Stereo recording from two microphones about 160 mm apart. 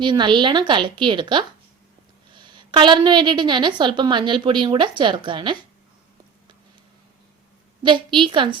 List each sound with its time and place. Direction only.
0.0 s a woman's voice: 30° right (ahead or behind)
7.8 s a woman's voice: 30° right (ahead or behind)